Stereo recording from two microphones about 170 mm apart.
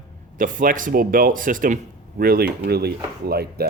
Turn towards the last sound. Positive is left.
turn(degrees=-65)  # may be behind; listen again after turning